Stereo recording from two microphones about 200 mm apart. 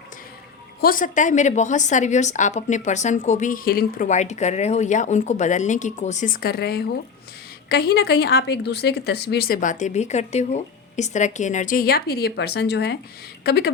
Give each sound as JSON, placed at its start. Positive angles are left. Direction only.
{"t": 0.8, "sound": "a woman's voice", "side_deg": 45}